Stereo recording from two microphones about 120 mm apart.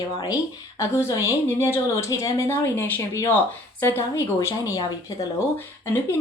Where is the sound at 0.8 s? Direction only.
25° left (ahead or behind).